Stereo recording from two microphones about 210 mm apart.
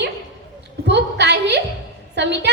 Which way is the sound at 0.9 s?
55° right (ahead or behind).